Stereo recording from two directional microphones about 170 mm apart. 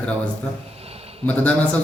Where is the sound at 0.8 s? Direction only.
35° right (ahead or behind).